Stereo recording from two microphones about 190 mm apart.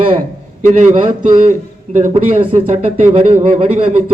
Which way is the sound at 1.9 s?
40° right (ahead or behind).